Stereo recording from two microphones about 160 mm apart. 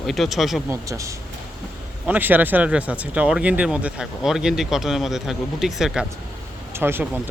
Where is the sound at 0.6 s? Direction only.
20° right (ahead or behind); by 6.0 s centre (ahead or behind).